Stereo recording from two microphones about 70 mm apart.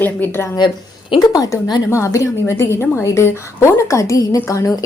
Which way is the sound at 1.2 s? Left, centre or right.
Left.